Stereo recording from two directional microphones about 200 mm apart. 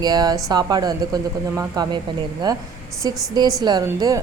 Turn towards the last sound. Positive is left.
turn(degrees=-15)  # may be behind; listen again after turning